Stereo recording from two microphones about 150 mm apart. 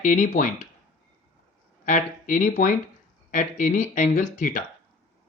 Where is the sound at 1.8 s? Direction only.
60° left (ahead or behind).